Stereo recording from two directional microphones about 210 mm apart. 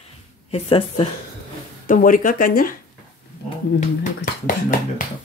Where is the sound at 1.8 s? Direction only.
40° left (ahead or behind).